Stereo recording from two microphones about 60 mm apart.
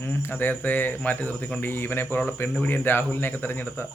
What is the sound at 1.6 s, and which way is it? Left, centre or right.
A man's voice, left.